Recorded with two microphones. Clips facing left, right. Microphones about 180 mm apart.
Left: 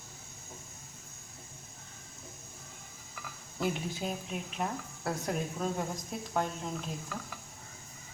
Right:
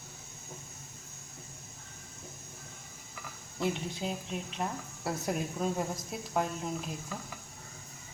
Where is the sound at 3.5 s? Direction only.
Centre (ahead or behind).